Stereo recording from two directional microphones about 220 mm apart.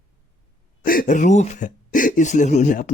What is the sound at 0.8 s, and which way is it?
Speech, 40° left (ahead or behind).